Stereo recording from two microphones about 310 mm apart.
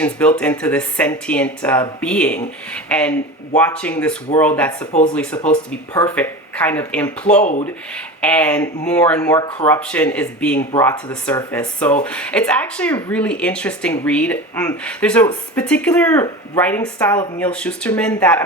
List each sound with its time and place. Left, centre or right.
0.0 s speech: centre
4.9 s speech: left
5.1 s speech: centre